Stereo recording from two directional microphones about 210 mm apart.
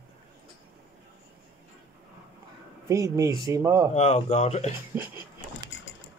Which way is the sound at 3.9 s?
30° left (ahead or behind).